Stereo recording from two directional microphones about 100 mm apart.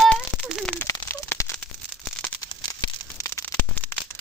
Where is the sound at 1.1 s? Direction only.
30° left (ahead or behind).